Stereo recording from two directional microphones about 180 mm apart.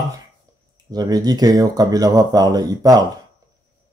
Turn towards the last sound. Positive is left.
turn(degrees=-20)  # may be behind; listen again after turning